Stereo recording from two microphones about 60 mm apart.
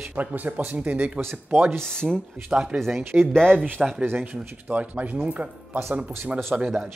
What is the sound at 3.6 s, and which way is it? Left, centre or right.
Speech, centre.